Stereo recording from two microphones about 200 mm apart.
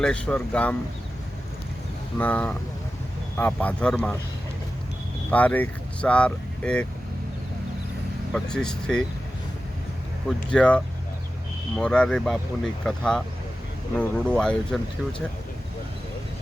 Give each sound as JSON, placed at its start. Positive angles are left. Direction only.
{"t": 0.0, "sound": "speech", "side_deg": 5}
{"t": 2.1, "sound": "speech", "side_deg": 5}
{"t": 5.3, "sound": "speech", "side_deg": 5}
{"t": 8.3, "sound": "speech", "side_deg": 5}
{"t": 10.5, "sound": "speech", "side_deg": 5}